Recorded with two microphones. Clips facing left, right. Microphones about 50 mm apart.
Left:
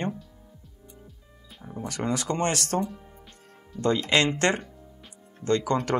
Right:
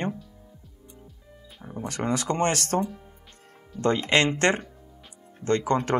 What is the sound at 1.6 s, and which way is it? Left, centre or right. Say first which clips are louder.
Speech: right 1 dB; centre.